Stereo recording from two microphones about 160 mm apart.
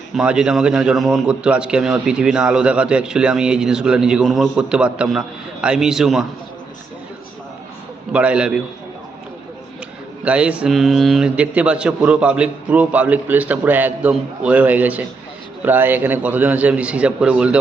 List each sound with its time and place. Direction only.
0.1 s a man's voice: 5° right (ahead or behind)
8.1 s a man's voice: 5° right (ahead or behind)
10.2 s a man's voice: 5° right (ahead or behind)